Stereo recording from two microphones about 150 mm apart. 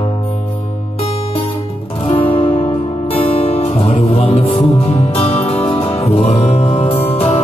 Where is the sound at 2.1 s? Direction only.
40° left (ahead or behind).